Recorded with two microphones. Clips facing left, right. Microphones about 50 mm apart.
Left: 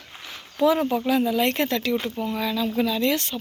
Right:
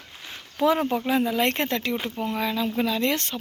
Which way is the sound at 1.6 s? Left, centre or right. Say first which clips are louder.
Left 2 dB; right.